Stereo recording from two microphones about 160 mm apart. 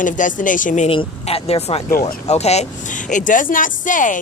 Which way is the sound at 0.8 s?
35° left (ahead or behind).